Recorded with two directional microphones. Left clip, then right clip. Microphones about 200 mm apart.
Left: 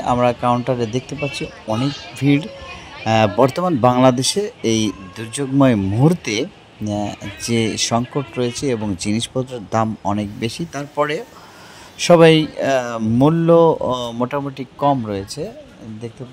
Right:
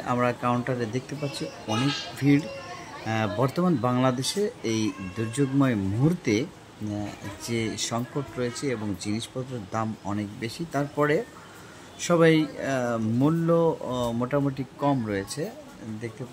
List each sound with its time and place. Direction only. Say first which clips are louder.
0.0 s speech: left 9 dB; 25° left (ahead or behind)
3.1 s speech: left 12 dB; 35° left (ahead or behind); by 15.5 s 15° left (ahead or behind)